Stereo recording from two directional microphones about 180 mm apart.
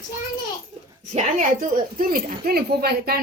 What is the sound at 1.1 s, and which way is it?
Speech, 40° right (ahead or behind).